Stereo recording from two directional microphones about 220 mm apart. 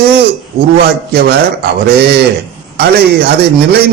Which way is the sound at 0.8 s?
50° right (ahead or behind).